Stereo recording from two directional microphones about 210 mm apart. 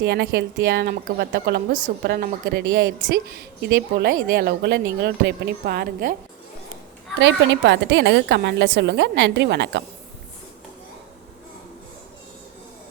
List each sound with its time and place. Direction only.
0.0 s a woman's voice: 50° right (ahead or behind)
7.2 s a woman's voice: 60° right (ahead or behind)